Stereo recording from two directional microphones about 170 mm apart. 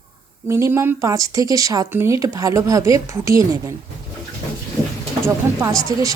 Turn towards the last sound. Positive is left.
turn(degrees=-20)  # may be behind; listen again after turning